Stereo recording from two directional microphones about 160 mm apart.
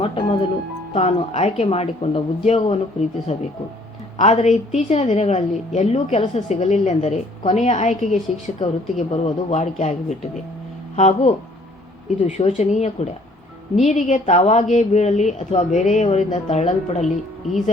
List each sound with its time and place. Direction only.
0.0 s music: 30° left (ahead or behind)
0.9 s speech: 40° left (ahead or behind)